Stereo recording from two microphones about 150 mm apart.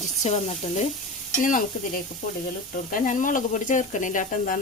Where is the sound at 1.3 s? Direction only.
60° left (ahead or behind).